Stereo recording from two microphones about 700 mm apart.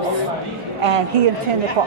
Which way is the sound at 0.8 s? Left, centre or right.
Right.